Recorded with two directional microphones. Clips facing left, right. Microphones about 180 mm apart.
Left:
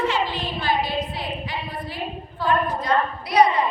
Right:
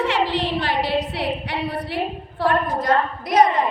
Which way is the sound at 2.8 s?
45° right (ahead or behind).